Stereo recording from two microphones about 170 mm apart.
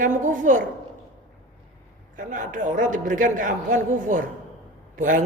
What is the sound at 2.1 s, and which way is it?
A man's voice, 50° right (ahead or behind).